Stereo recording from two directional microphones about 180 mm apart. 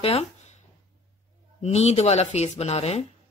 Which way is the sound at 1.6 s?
35° left (ahead or behind).